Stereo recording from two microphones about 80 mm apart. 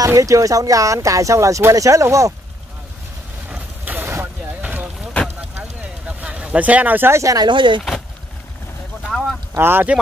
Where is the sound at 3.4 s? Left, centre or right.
Right.